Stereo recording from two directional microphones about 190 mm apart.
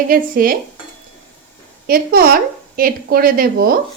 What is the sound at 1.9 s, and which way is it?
A woman's voice, 50° right (ahead or behind).